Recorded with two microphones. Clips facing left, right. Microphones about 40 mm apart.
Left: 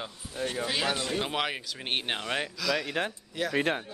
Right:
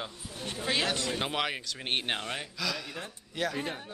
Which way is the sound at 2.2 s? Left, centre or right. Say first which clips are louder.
Left 5 dB; left.